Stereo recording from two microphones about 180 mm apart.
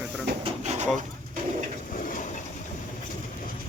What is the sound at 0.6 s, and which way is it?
Drawer open or close, 40° right (ahead or behind).